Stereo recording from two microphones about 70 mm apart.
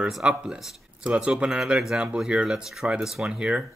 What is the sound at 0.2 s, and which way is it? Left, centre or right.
Speech, centre.